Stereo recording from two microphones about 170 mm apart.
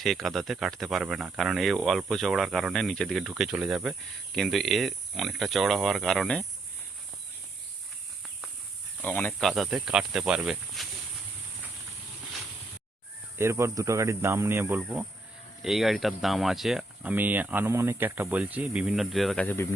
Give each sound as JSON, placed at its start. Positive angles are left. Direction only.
{"t": 0.0, "sound": "speech", "side_deg": 0}
{"t": 9.0, "sound": "speech", "side_deg": 10}
{"t": 13.4, "sound": "speech", "side_deg": -15}